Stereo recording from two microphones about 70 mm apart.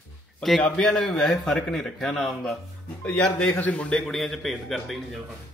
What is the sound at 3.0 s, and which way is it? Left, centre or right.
A man's voice, centre.